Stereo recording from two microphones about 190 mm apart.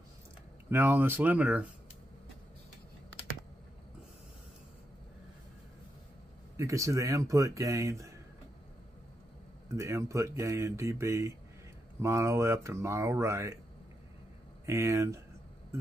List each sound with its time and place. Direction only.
0.7 s speech: 10° right (ahead or behind)
6.5 s speech: 15° right (ahead or behind)
9.8 s speech: 15° right (ahead or behind)
14.7 s speech: 15° right (ahead or behind)